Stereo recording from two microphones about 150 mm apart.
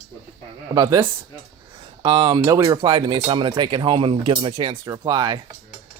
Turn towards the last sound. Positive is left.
turn(degrees=-30)  # may be behind; listen again after turning